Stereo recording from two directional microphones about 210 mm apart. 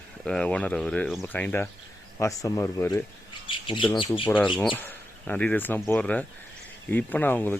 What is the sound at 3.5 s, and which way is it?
Speech, 25° left (ahead or behind).